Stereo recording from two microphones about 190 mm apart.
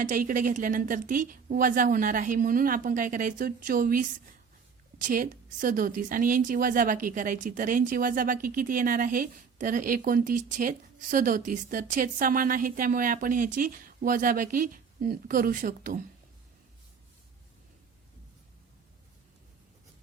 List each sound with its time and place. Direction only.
0.0 s a woman's voice: 45° right (ahead or behind)